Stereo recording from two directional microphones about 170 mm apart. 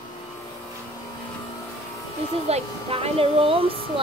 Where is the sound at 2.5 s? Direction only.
35° right (ahead or behind).